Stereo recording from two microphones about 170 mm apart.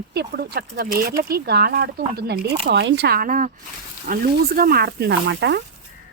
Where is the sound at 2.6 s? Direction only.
90° right.